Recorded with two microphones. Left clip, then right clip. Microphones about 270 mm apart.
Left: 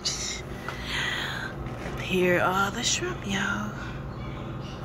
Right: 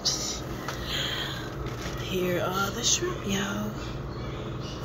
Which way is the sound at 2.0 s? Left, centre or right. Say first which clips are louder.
Left 5 dB; centre.